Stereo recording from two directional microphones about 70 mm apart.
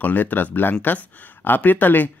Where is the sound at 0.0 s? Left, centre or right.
Left.